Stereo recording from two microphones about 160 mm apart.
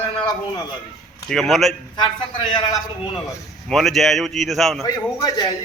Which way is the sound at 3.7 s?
Centre (ahead or behind).